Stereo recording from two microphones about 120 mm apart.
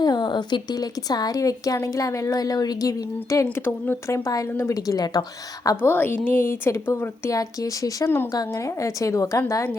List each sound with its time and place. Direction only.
0.0 s a woman's voice: 35° left (ahead or behind)
5.6 s a woman's voice: 20° left (ahead or behind)